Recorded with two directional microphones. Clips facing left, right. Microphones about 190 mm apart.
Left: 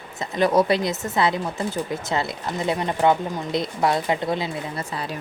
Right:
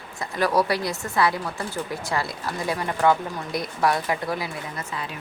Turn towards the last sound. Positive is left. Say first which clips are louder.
# left 3 dB
turn(degrees=35)  # may be behind; listen again after turning